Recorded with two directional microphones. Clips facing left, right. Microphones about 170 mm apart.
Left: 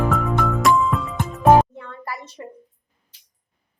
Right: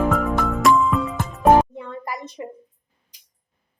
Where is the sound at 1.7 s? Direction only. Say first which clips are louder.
Right 3 dB; 15° right (ahead or behind).